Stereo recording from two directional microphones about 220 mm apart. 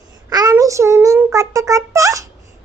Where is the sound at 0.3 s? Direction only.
15° right (ahead or behind).